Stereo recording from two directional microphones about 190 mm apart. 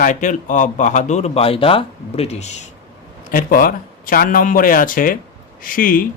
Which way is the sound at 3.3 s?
50° left (ahead or behind).